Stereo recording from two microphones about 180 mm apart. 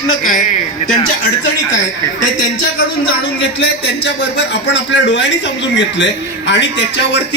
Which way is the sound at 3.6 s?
70° left (ahead or behind).